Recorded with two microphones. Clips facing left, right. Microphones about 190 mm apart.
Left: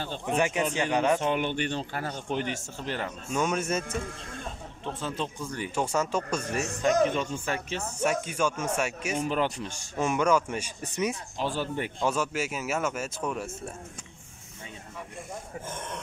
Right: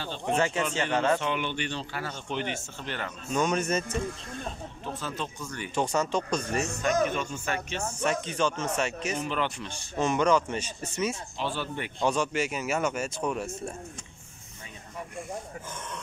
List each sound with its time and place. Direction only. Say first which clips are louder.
0.4 s speech: left 2 dB; 15° left (ahead or behind)
1.2 s speech: left 3 dB; 45° left (ahead or behind)
3.3 s speech: right 2 dB; 5° left (ahead or behind)
4.8 s speech: left 2 dB; 25° left (ahead or behind)
5.8 s speech: right 1 dB; 5° left (ahead or behind)
6.8 s speech: left 4 dB; 25° left (ahead or behind)
8.0 s speech: left 1 dB; 10° left (ahead or behind)
9.2 s speech: left 6 dB; 40° left (ahead or behind)
9.9 s speech: right 1 dB; 10° left (ahead or behind)
11.3 s speech: left 2 dB; 40° left (ahead or behind)
12.0 s speech: right 3 dB; 5° left (ahead or behind)